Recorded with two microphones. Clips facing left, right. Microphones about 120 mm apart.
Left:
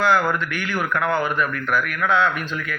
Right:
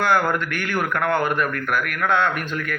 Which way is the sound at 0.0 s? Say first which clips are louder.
Left 1 dB; 50° right (ahead or behind).